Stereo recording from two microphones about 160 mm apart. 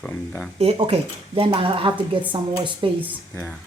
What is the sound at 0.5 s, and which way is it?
Speech, 40° right (ahead or behind).